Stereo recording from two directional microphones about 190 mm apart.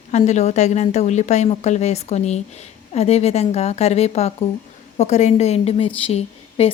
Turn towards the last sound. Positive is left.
turn(degrees=30)  # may be behind; listen again after turning